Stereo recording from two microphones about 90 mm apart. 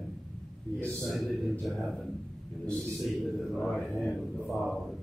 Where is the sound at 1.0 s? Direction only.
Centre (ahead or behind).